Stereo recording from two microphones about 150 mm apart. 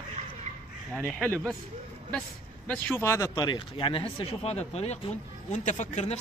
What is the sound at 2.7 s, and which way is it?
Speech, 10° left (ahead or behind).